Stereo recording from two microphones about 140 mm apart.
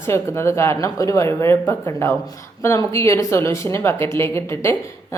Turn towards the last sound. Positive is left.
turn(degrees=20)  # may be behind; listen again after turning